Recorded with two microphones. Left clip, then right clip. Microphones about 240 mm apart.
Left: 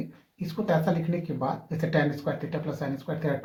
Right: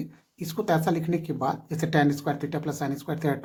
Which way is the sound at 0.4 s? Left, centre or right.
Right.